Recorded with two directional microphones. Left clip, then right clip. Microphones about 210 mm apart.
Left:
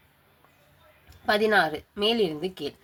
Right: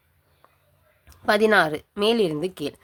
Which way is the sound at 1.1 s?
40° right (ahead or behind).